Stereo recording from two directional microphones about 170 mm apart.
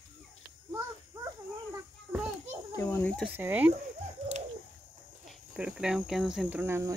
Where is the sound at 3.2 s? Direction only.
10° right (ahead or behind).